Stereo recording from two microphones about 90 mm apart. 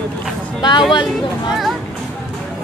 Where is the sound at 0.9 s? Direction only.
55° left (ahead or behind).